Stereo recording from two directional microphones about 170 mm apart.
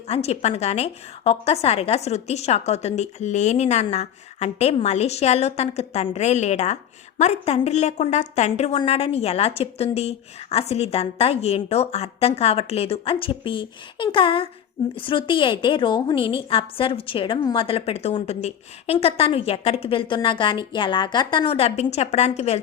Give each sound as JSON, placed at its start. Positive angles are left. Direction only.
{"t": 0.1, "sound": "a woman's voice", "side_deg": 35}